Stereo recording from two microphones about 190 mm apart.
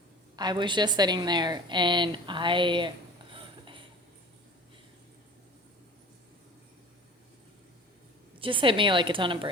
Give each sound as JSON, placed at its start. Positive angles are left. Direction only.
{"t": 0.3, "sound": "a woman's voice", "side_deg": -20}
{"t": 3.3, "sound": "a sound", "side_deg": -25}
{"t": 8.4, "sound": "a woman's voice", "side_deg": -25}